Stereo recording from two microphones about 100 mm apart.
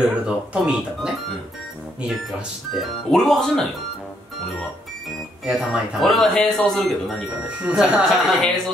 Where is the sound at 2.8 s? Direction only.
5° left (ahead or behind).